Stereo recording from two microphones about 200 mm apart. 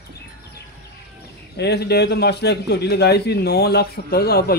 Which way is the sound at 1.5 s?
55° left (ahead or behind).